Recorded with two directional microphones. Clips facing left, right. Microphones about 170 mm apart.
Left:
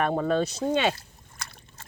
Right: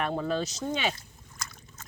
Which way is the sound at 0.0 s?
50° left (ahead or behind).